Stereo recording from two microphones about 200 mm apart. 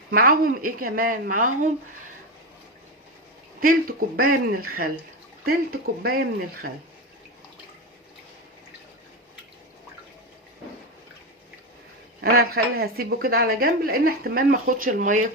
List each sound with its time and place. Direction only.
0.1 s a woman's voice: 50° right (ahead or behind)
3.6 s a woman's voice: 45° right (ahead or behind)
12.4 s a woman's voice: 50° right (ahead or behind)